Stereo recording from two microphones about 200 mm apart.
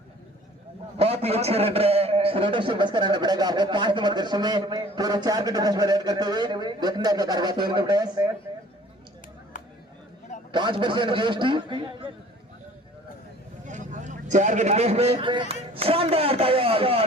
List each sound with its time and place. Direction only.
0.9 s a man's voice: 30° right (ahead or behind)
9.5 s chop: 40° left (ahead or behind)
10.5 s a man's voice: 25° right (ahead or behind)
13.7 s speech: 40° right (ahead or behind)